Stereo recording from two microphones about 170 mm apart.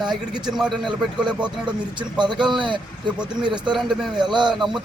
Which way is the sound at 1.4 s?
25° right (ahead or behind).